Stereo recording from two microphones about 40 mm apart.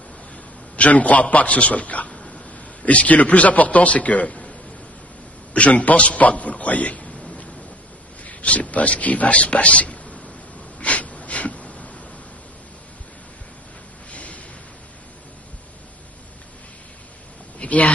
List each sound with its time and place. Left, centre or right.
0.7 s a man's voice: left
2.0 s a sound: left
2.8 s a man's voice: left
5.5 s a man's voice: left
8.2 s a man's voice: left
10.8 s snort: left
14.1 s a sound: left
17.6 s speech: left